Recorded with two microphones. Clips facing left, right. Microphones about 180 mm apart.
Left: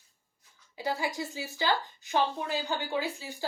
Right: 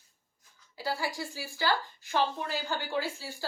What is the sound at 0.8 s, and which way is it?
A woman's voice, 20° left (ahead or behind).